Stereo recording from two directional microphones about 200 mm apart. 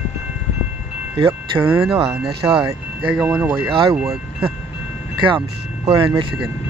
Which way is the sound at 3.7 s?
25° right (ahead or behind).